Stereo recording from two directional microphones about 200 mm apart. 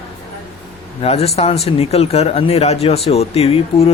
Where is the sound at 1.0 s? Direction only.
30° left (ahead or behind).